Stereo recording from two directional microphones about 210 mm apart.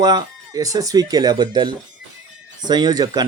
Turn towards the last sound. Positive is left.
turn(degrees=-20)  # may be behind; listen again after turning